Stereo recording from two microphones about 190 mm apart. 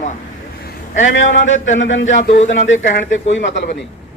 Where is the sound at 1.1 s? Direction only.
80° left.